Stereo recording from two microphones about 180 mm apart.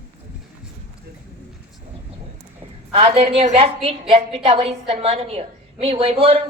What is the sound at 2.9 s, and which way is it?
A woman's voice, 35° right (ahead or behind).